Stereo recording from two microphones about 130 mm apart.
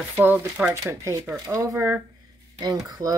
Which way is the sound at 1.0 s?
25° right (ahead or behind).